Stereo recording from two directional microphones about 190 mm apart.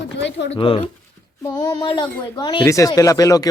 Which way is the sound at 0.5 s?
30° left (ahead or behind).